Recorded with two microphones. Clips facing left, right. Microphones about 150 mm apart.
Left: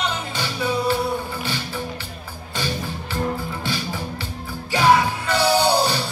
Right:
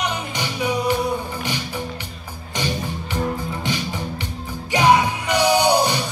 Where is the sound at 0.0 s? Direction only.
15° right (ahead or behind).